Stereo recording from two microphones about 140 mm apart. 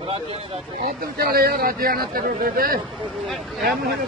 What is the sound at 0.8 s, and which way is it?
A man's voice, 90° right.